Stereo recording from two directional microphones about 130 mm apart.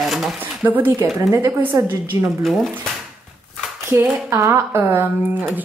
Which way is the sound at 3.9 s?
20° right (ahead or behind).